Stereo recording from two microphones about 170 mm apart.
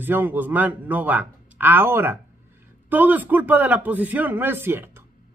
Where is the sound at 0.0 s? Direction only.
10° right (ahead or behind).